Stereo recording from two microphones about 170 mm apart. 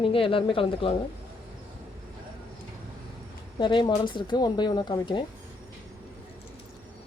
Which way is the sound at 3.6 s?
25° left (ahead or behind).